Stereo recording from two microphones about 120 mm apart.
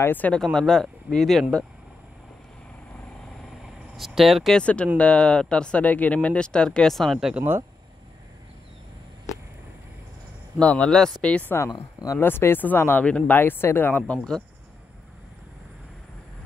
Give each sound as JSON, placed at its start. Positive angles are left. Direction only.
{"t": 0.0, "sound": "speech", "side_deg": 15}
{"t": 0.4, "sound": "speech", "side_deg": 5}
{"t": 3.9, "sound": "speech", "side_deg": 0}
{"t": 10.6, "sound": "speech", "side_deg": 10}
{"t": 11.7, "sound": "speech", "side_deg": 30}
{"t": 12.2, "sound": "speech", "side_deg": 20}